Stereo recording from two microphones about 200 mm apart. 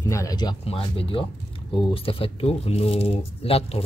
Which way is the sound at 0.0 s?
15° left (ahead or behind).